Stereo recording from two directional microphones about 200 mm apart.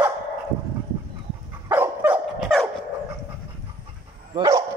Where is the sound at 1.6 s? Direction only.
10° right (ahead or behind).